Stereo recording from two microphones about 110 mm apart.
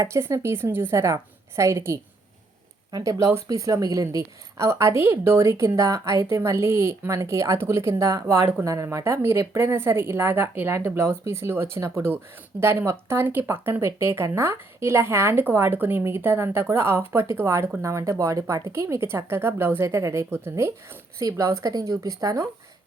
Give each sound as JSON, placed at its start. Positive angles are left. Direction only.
{"t": 0.0, "sound": "speech", "side_deg": -25}